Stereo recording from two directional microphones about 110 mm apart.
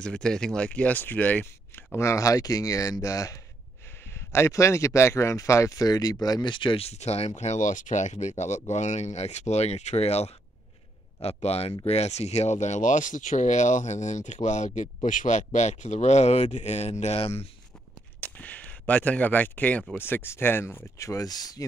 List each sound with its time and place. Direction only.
0.0 s speech: 5° left (ahead or behind); by 6.9 s 50° left (ahead or behind)
6.9 s speech: 75° left (ahead or behind)
17.0 s speech: 70° left (ahead or behind)
18.2 s speech: 15° left (ahead or behind)
20.0 s speech: 20° left (ahead or behind); by 21.6 s 35° left (ahead or behind)